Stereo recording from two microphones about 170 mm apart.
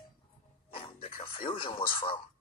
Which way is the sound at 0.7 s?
35° left (ahead or behind).